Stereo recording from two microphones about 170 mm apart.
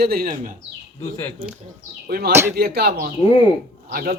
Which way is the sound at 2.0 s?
65° right (ahead or behind).